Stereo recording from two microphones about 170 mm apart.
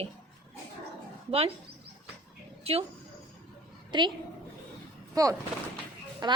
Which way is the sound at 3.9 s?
25° right (ahead or behind).